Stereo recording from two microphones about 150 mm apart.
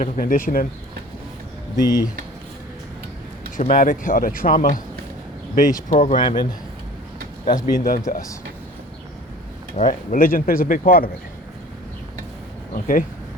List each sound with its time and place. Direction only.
0.0 s a man's voice: 65° left (ahead or behind)
1.7 s speech: 25° left (ahead or behind)
3.7 s a man's voice: 60° left (ahead or behind)
5.9 s a man's voice: 60° left (ahead or behind)
6.1 s speech: 30° left (ahead or behind)
7.5 s speech: 70° left (ahead or behind)
9.7 s speech: 60° left (ahead or behind)
12.7 s speech: 65° left (ahead or behind)